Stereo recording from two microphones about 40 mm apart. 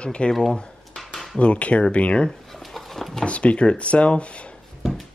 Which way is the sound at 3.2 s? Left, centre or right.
Left.